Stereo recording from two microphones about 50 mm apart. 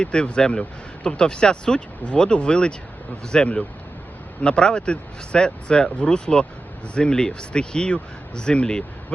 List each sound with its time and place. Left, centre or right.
0.0 s speech: centre